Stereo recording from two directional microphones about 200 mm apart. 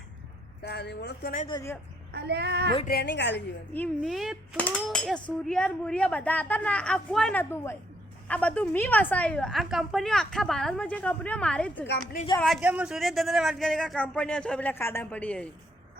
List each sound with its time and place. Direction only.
0.6 s speech: 55° left (ahead or behind)
1.5 s speech: 15° left (ahead or behind)
2.1 s a child's voice: 55° right (ahead or behind)
2.8 s a woman's voice: 50° left (ahead or behind)
3.9 s a woman's voice: centre (ahead or behind)